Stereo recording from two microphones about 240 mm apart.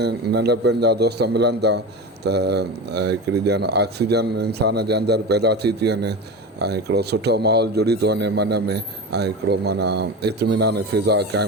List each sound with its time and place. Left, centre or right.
0.0 s a man's voice: right